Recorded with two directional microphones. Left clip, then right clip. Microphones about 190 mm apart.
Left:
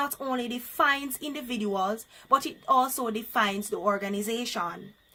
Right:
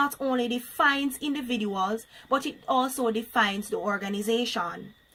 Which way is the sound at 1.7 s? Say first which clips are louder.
Left 2 dB; 20° left (ahead or behind).